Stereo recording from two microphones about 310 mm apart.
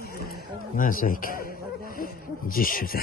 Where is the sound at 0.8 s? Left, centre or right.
Left.